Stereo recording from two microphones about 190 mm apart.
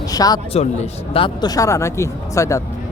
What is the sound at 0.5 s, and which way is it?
Speech, 35° left (ahead or behind).